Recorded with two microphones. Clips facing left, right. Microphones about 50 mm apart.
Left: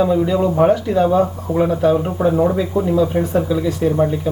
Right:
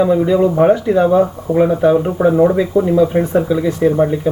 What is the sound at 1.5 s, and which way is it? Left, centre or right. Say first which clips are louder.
Speech: right 3 dB; right.